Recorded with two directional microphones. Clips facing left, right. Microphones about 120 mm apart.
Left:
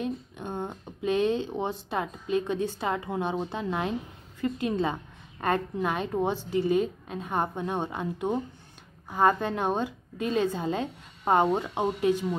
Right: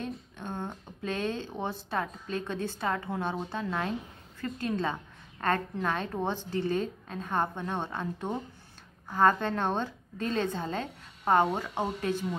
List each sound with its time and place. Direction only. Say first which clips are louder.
0.0 s a woman's voice: left 5 dB; 15° left (ahead or behind)